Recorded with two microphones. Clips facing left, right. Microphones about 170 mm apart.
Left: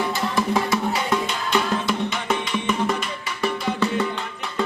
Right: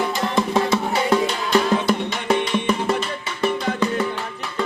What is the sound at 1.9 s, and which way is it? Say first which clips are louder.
Music: right 3 dB; 35° right (ahead or behind).